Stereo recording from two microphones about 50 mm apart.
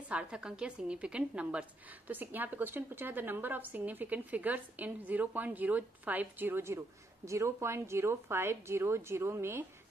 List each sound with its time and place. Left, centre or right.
0.1 s a woman's voice: centre
2.1 s a woman's voice: right
7.2 s a woman's voice: right